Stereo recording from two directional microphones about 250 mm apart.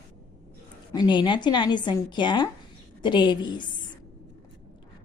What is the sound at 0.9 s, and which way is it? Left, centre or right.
Speech, centre.